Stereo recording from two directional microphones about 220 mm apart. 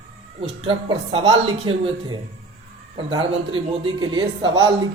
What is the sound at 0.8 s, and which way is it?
A man's voice, 20° right (ahead or behind).